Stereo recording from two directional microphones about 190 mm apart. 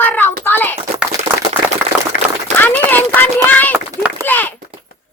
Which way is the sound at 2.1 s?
50° left (ahead or behind).